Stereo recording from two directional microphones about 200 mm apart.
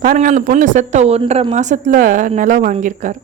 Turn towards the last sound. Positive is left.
turn(degrees=-40)  # may be behind; listen again after turning